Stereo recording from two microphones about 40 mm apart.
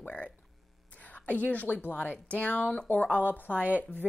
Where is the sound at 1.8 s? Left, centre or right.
Left.